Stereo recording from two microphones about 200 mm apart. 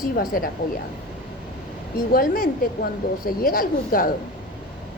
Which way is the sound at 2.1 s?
45° left (ahead or behind).